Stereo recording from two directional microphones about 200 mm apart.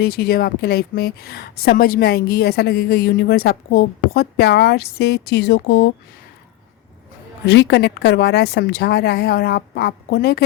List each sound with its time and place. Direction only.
0.0 s speech: 50° left (ahead or behind)
7.4 s a woman's voice: 60° left (ahead or behind)